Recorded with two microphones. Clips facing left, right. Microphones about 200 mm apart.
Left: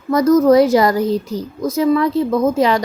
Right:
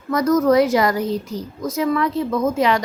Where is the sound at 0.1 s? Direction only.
30° left (ahead or behind).